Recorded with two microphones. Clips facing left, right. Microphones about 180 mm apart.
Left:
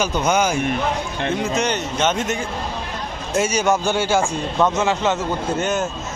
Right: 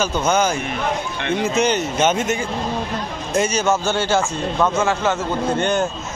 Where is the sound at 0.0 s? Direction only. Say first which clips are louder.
Even; 15° left (ahead or behind).